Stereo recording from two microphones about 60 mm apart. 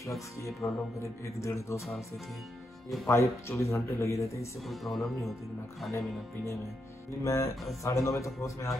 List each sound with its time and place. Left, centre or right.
0.6 s speech: left
3.1 s speech: left
4.6 s speech: centre
5.9 s speech: left